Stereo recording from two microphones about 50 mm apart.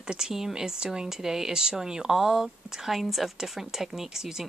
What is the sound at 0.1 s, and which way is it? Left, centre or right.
Speech, centre.